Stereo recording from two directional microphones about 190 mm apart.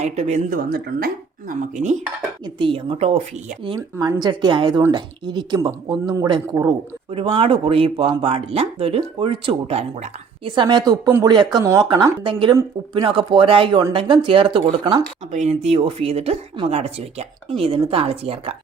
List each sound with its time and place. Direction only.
0.0 s speech: 35° right (ahead or behind)
2.4 s speech: 25° right (ahead or behind)
3.8 s speech: 15° right (ahead or behind); by 18.5 s 30° right (ahead or behind)